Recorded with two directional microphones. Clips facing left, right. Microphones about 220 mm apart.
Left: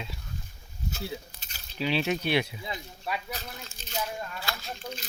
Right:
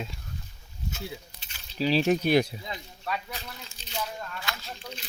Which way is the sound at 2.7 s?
15° left (ahead or behind).